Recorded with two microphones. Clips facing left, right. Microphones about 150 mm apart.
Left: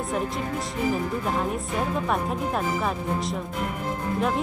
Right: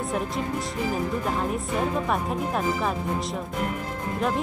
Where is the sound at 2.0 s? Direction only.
Centre (ahead or behind).